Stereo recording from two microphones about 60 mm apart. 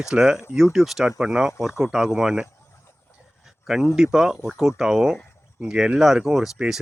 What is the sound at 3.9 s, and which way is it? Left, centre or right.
Speech, centre.